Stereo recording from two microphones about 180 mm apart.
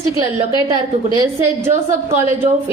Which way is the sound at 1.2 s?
15° right (ahead or behind).